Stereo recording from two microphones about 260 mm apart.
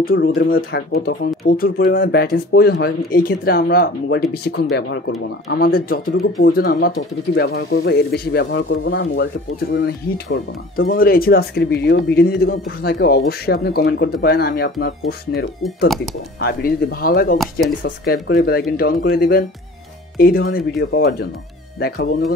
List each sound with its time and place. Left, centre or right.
0.0 s speech: left